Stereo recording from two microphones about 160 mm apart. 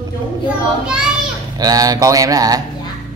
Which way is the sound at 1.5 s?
25° right (ahead or behind).